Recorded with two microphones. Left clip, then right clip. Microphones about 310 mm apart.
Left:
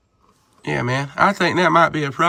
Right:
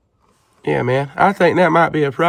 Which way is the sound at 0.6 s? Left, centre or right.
Centre.